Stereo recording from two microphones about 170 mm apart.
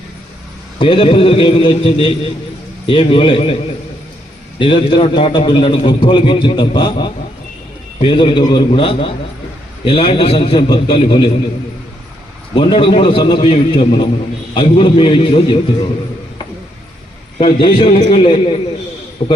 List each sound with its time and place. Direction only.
0.8 s a man's voice: 30° left (ahead or behind)
4.6 s a man's voice: 30° left (ahead or behind)
12.5 s a man's voice: 30° left (ahead or behind)
17.4 s a man's voice: 30° left (ahead or behind)